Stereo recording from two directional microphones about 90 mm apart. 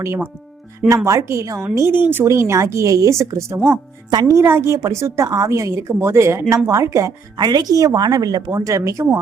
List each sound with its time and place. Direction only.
0.0 s speech: 30° right (ahead or behind)
7.3 s a woman's voice: 50° right (ahead or behind)